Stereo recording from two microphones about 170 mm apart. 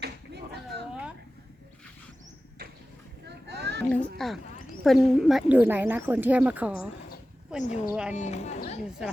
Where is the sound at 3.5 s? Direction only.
80° right.